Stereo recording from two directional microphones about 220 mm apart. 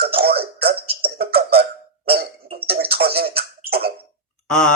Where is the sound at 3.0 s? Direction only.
45° right (ahead or behind).